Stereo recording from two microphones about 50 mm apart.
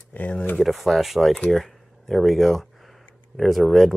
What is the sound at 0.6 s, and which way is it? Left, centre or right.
Speech, centre.